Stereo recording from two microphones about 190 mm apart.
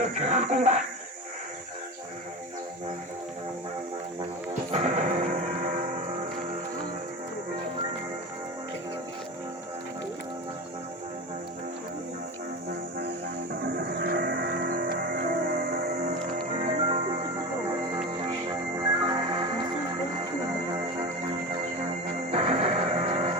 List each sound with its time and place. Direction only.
0.2 s speech: 40° right (ahead or behind)
4.7 s music: 35° right (ahead or behind)
13.6 s music: 50° right (ahead or behind); by 17.0 s 35° right (ahead or behind)
18.4 s music: 25° right (ahead or behind)
22.3 s music: 30° right (ahead or behind)